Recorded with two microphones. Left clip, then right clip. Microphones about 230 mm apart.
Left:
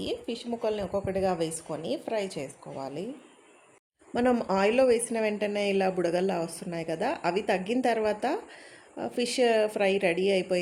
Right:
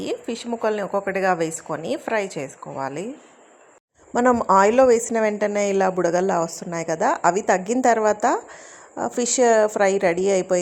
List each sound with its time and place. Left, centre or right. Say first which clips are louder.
0.0 s a woman's voice: right 6 dB; centre
4.1 s a woman's voice: right 9 dB; centre